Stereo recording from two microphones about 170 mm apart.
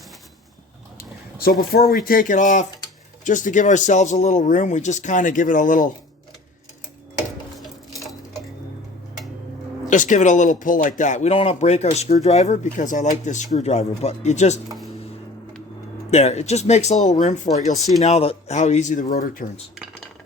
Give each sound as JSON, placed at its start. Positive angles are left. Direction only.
{"t": 0.9, "sound": "a sound", "side_deg": 60}
{"t": 1.9, "sound": "speech", "side_deg": 55}
{"t": 9.8, "sound": "speech", "side_deg": 45}
{"t": 16.0, "sound": "speech", "side_deg": 40}
{"t": 17.7, "sound": "speech", "side_deg": 0}
{"t": 18.0, "sound": "speech", "side_deg": 40}